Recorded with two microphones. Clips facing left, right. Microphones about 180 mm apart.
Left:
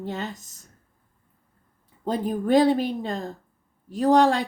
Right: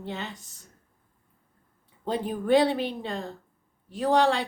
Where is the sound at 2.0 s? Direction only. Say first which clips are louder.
Left 3 dB; 40° left (ahead or behind).